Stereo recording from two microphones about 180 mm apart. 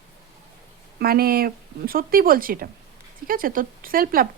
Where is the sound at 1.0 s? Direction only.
55° right (ahead or behind).